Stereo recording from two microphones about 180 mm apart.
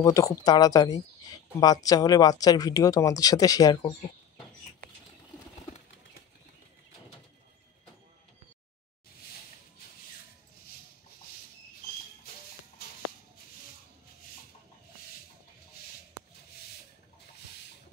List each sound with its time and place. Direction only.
0.0 s speech: 20° left (ahead or behind)